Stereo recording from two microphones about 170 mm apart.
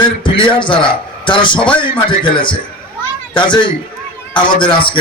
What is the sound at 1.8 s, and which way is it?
Speech, 30° left (ahead or behind).